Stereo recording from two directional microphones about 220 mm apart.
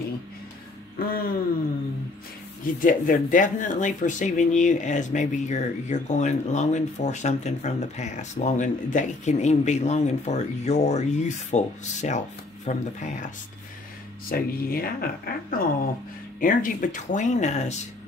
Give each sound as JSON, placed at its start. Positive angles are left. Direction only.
{"t": 0.9, "sound": "speech", "side_deg": 40}
{"t": 2.6, "sound": "speech", "side_deg": 40}
{"t": 14.3, "sound": "speech", "side_deg": 40}